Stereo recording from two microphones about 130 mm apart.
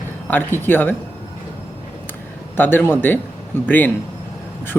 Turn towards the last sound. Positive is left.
turn(degrees=15)  # may be behind; listen again after turning